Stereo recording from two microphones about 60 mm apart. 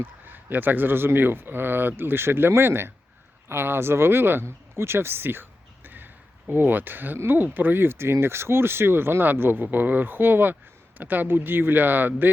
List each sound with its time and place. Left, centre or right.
0.0 s speech: right